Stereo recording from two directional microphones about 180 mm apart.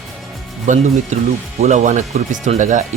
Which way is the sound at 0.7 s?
45° right (ahead or behind).